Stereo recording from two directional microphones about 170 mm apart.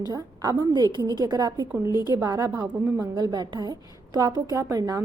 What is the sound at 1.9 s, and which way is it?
Speech, 25° left (ahead or behind).